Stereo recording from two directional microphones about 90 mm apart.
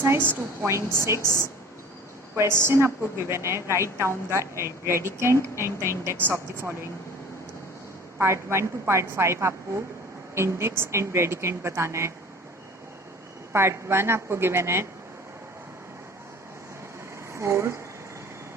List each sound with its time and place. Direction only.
0.0 s a woman's voice: 20° right (ahead or behind)
2.3 s a woman's voice: 30° right (ahead or behind)
8.2 s a woman's voice: 30° right (ahead or behind)
13.5 s a woman's voice: 30° right (ahead or behind)
17.3 s speech: 30° right (ahead or behind)